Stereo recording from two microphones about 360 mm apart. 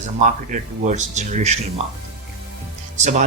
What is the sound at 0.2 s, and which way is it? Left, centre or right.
Speech, right.